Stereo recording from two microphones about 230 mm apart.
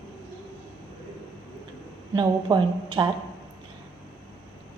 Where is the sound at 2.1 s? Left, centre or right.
Centre.